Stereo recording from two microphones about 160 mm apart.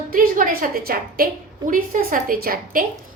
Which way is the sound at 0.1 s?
60° right (ahead or behind).